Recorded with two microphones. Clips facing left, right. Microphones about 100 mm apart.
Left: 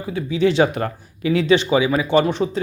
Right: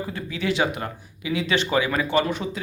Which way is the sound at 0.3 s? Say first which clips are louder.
Left 8 dB; 25° left (ahead or behind).